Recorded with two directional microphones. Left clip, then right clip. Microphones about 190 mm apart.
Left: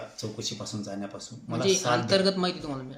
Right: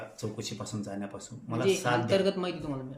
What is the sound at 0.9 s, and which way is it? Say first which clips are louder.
Speech: left 2 dB; 5° right (ahead or behind).